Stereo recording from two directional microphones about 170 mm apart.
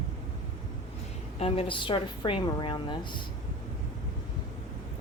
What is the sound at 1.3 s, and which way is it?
Speech, 35° left (ahead or behind).